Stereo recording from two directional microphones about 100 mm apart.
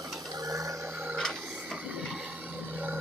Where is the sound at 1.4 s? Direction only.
15° right (ahead or behind).